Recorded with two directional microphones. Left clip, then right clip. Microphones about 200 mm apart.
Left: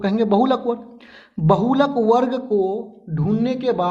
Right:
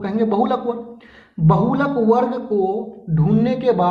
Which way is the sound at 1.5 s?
50° left (ahead or behind).